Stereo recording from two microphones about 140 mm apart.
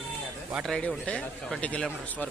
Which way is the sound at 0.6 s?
5° left (ahead or behind).